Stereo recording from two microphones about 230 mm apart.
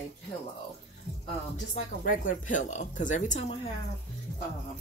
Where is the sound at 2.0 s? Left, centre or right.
Left.